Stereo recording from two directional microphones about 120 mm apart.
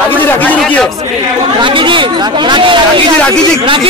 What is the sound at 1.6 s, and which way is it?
Speech, 45° right (ahead or behind).